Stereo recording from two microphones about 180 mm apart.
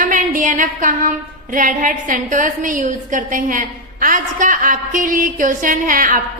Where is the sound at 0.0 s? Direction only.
45° right (ahead or behind).